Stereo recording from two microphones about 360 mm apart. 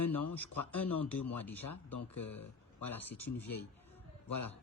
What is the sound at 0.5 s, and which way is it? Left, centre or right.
Speech, left.